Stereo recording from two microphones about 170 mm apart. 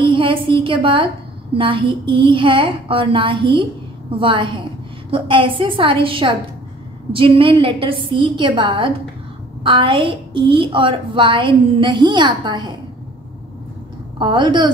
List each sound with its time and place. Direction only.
0.0 s a woman's voice: 30° right (ahead or behind)
14.1 s a woman's voice: 30° right (ahead or behind)